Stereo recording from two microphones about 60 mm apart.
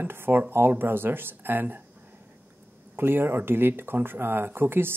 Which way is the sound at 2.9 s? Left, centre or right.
Right.